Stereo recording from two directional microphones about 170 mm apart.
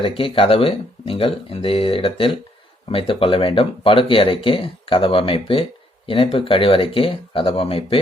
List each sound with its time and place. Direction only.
0.0 s speech: 30° left (ahead or behind)